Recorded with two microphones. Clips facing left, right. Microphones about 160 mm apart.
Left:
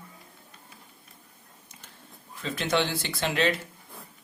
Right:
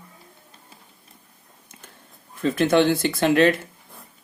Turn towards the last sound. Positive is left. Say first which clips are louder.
# right 9 dB
turn(degrees=-50)  # may be behind; listen again after turning